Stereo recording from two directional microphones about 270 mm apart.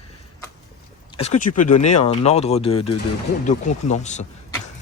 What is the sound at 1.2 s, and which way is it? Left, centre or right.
Speech, left.